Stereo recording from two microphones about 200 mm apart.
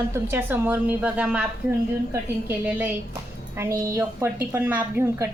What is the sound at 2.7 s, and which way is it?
A woman's voice, 5° right (ahead or behind).